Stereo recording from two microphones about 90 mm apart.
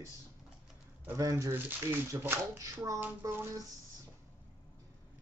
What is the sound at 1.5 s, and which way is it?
Speech, 20° right (ahead or behind).